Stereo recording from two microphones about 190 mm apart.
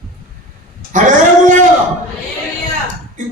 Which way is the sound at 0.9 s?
40° right (ahead or behind).